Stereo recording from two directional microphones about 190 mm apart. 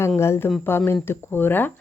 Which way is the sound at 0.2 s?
15° left (ahead or behind).